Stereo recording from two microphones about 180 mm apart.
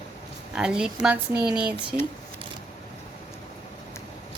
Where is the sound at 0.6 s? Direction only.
5° right (ahead or behind).